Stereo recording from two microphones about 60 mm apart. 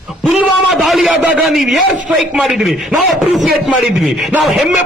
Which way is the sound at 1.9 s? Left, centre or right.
Right.